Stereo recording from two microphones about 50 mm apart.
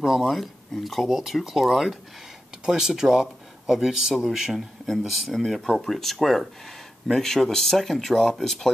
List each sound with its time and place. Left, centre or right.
0.0 s speech: centre
2.6 s speech: centre